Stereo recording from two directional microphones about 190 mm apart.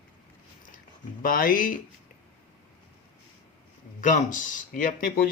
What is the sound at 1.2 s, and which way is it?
Speech, 45° left (ahead or behind).